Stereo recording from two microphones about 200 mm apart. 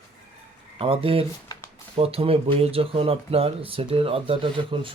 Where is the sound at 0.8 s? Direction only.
25° right (ahead or behind).